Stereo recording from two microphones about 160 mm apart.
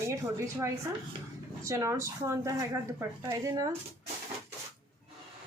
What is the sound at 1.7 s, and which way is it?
Speech, 20° right (ahead or behind).